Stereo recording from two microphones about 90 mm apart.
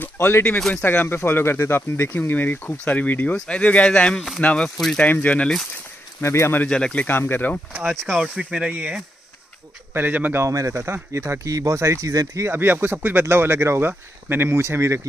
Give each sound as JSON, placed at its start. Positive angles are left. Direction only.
{"t": 0.0, "sound": "speech", "side_deg": 20}
{"t": 0.6, "sound": "speech", "side_deg": 5}
{"t": 0.8, "sound": "speech", "side_deg": 20}
{"t": 4.6, "sound": "speech", "side_deg": 5}
{"t": 5.0, "sound": "speech", "side_deg": 20}
{"t": 6.2, "sound": "speech", "side_deg": 30}
{"t": 6.7, "sound": "speech", "side_deg": 10}
{"t": 7.1, "sound": "speech", "side_deg": 25}
{"t": 8.2, "sound": "speech", "side_deg": -10}
{"t": 10.5, "sound": "speech", "side_deg": -40}
{"t": 12.4, "sound": "speech", "side_deg": -25}